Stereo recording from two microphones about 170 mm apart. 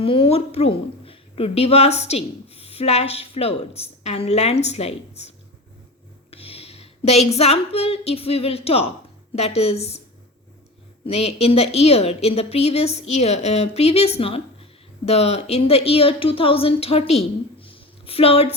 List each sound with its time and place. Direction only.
0.0 s a woman's voice: 35° left (ahead or behind)
6.3 s a sound: 35° left (ahead or behind)
9.3 s a woman's voice: 40° left (ahead or behind)
11.0 s a woman's voice: 40° left (ahead or behind)